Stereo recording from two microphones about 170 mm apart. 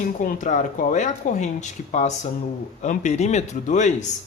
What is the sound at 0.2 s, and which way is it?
Speech, 50° left (ahead or behind).